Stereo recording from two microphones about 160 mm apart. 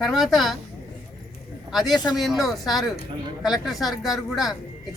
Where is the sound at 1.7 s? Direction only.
Centre (ahead or behind).